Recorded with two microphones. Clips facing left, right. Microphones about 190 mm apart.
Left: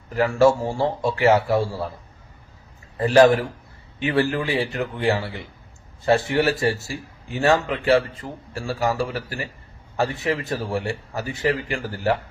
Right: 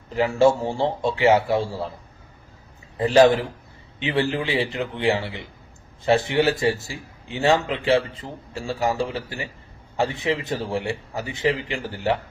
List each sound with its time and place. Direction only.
0.1 s a man's voice: 20° right (ahead or behind)
3.0 s a man's voice: 20° right (ahead or behind)